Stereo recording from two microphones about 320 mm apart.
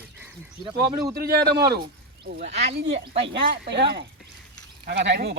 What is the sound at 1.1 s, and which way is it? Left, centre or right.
Speech, right.